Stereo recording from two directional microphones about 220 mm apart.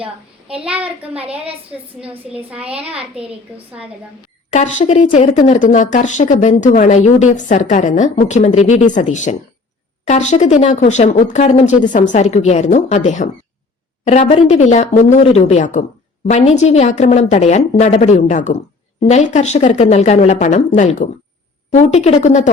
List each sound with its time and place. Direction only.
0.0 s a child's voice: 25° right (ahead or behind)
1.7 s a woman's voice: 5° right (ahead or behind)
2.1 s a child's voice: 25° right (ahead or behind)
4.5 s speech: 30° left (ahead or behind)